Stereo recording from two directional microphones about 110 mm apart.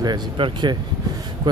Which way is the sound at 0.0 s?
40° right (ahead or behind).